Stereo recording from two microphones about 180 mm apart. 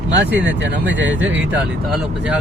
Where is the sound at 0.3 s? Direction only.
90° right.